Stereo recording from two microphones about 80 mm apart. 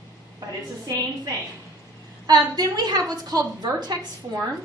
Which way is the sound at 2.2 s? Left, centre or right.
Right.